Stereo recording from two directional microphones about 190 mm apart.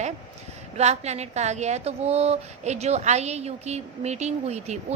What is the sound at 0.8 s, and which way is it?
A woman's voice, 35° right (ahead or behind).